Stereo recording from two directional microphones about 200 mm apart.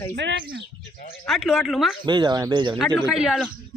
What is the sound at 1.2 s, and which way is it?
Speech, centre (ahead or behind).